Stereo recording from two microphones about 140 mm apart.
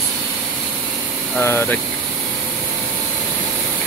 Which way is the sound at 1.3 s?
15° left (ahead or behind).